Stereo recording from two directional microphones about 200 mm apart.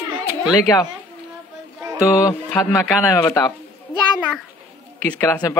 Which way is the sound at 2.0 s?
15° left (ahead or behind).